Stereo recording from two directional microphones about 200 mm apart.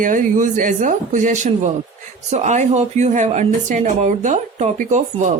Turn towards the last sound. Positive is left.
turn(degrees=-40)  # may be behind; listen again after turning